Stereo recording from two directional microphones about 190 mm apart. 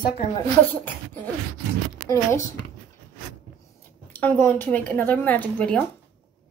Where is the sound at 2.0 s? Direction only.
15° left (ahead or behind).